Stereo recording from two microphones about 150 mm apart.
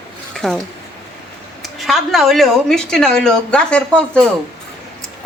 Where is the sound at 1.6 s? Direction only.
Centre (ahead or behind).